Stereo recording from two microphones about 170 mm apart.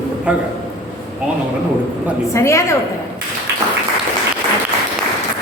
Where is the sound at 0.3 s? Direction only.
5° right (ahead or behind).